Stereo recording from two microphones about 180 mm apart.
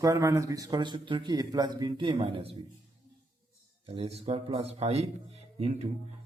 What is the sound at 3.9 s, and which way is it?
Speech, 35° right (ahead or behind).